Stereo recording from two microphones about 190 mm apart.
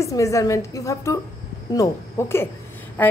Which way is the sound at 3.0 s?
10° left (ahead or behind).